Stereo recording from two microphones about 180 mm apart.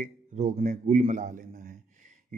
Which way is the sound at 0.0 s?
40° right (ahead or behind).